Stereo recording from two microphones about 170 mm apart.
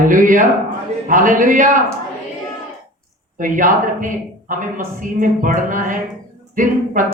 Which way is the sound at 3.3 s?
50° right (ahead or behind).